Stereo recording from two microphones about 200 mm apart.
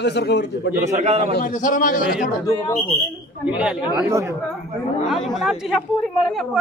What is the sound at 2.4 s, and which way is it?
Speech, 15° left (ahead or behind).